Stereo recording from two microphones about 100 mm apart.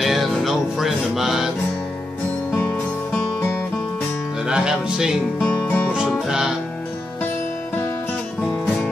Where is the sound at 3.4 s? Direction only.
25° left (ahead or behind).